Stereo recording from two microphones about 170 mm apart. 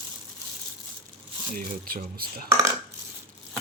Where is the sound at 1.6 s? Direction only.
60° right (ahead or behind).